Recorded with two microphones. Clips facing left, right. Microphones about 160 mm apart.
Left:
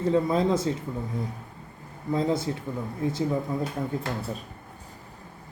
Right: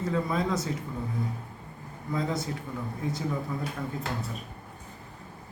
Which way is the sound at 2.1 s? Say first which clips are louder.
Left 5 dB; 30° left (ahead or behind).